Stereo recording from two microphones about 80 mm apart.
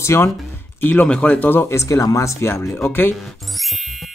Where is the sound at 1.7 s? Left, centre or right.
Left.